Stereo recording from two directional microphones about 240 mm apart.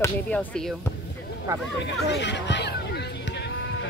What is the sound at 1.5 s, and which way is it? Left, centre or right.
Speech, centre.